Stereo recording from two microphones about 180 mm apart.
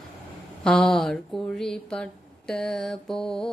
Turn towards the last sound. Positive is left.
turn(degrees=0)  # may be behind; listen again after turning